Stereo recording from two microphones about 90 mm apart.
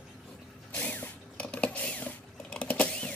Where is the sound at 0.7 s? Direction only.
15° left (ahead or behind).